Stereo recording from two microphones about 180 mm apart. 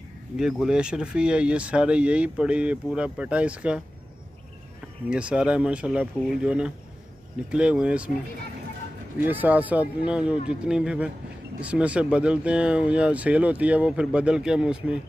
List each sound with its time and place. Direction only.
0.4 s speech: 5° right (ahead or behind)
5.1 s speech: 5° right (ahead or behind)
9.2 s speech: 10° right (ahead or behind)